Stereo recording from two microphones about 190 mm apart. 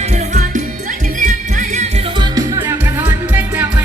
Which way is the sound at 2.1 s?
15° right (ahead or behind).